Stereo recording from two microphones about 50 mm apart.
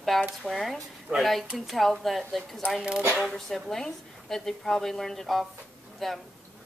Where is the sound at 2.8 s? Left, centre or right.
Right.